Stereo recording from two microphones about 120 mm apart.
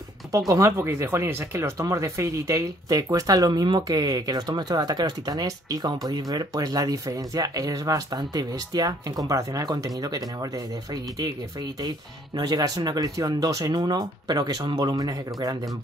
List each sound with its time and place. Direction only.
0.5 s speech: 25° right (ahead or behind)
12.4 s speech: 35° right (ahead or behind)